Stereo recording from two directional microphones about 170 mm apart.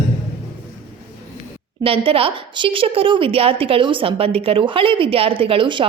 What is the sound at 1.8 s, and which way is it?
A woman's voice, 35° right (ahead or behind).